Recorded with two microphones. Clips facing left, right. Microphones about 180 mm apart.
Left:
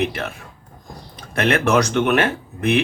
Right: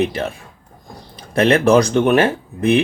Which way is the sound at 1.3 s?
30° right (ahead or behind).